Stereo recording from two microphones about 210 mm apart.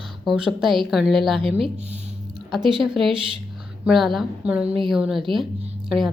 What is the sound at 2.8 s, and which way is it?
A woman's voice, centre (ahead or behind).